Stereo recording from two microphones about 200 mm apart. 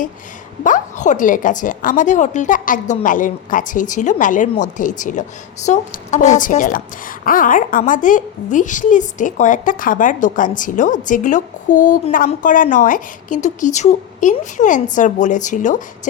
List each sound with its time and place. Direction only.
0.6 s a woman's voice: 40° left (ahead or behind)